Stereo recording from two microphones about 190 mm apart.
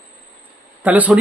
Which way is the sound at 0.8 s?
10° right (ahead or behind).